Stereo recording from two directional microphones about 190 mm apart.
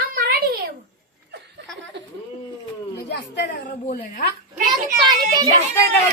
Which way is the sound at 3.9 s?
50° left (ahead or behind).